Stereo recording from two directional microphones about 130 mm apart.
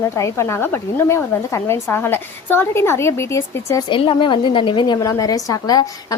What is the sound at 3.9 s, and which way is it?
A woman's voice, 40° left (ahead or behind).